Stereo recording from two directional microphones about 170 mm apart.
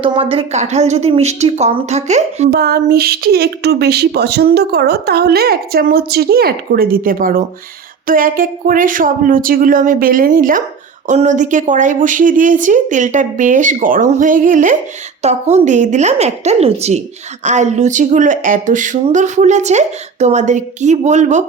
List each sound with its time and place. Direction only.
0.0 s a woman's voice: 30° right (ahead or behind)
2.5 s a woman's voice: 60° right (ahead or behind); by 21.4 s 45° right (ahead or behind)